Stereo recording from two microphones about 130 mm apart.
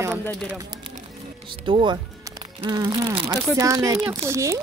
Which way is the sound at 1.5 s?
40° right (ahead or behind).